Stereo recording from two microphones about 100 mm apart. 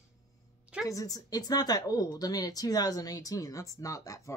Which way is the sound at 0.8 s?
35° left (ahead or behind).